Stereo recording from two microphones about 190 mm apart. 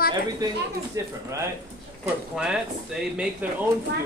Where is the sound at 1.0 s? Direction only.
15° right (ahead or behind).